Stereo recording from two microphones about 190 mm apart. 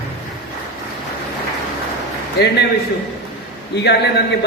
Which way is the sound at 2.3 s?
60° left (ahead or behind).